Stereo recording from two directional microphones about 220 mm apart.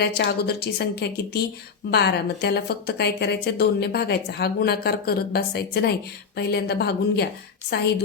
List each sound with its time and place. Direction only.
0.0 s a woman's voice: 50° left (ahead or behind)